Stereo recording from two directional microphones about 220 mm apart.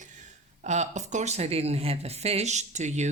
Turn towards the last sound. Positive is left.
turn(degrees=-30)  # may be behind; listen again after turning